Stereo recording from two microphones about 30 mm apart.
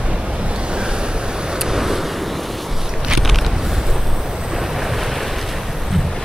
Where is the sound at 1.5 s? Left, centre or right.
Centre.